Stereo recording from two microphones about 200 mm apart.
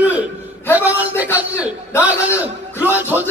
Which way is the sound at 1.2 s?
10° right (ahead or behind).